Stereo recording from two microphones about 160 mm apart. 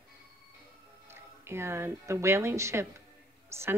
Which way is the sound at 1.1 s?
15° right (ahead or behind).